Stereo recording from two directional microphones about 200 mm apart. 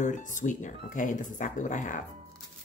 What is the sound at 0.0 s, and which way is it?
Speech, 40° left (ahead or behind).